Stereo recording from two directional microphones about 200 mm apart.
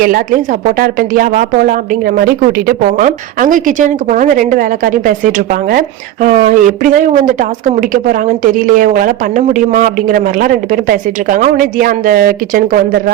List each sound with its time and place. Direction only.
0.8 s a woman's voice: 45° right (ahead or behind)